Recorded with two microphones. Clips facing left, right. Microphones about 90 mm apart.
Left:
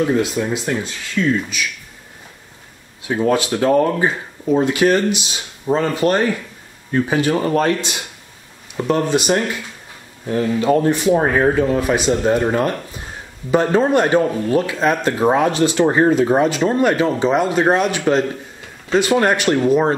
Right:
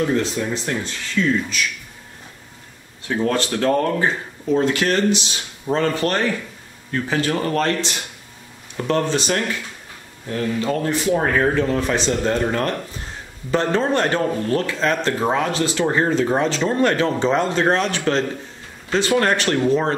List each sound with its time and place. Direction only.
0.0 s speech: 10° left (ahead or behind)
3.0 s speech: 10° left (ahead or behind)